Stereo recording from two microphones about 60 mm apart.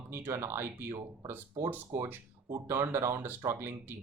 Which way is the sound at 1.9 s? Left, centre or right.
Right.